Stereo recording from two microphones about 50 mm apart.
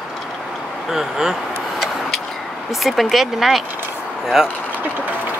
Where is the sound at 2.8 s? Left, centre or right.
Centre.